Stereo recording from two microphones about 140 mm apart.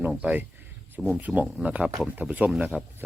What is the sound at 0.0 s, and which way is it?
Speech, 10° right (ahead or behind).